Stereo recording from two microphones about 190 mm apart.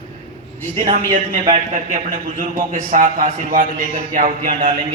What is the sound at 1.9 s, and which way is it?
A man's voice, 45° right (ahead or behind).